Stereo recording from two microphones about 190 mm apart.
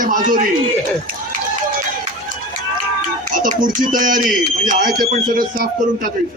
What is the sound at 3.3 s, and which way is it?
A man's voice, 45° right (ahead or behind).